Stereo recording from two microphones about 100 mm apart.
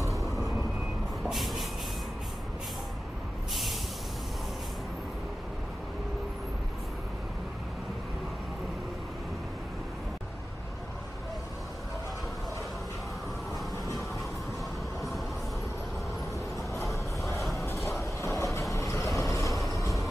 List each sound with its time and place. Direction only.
0.1 s vehicle: centre (ahead or behind)
1.2 s a sound: centre (ahead or behind)
17.6 s train: 30° left (ahead or behind)
18.2 s vehicle: 30° left (ahead or behind)